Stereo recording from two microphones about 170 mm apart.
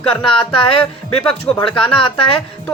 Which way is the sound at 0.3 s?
30° left (ahead or behind).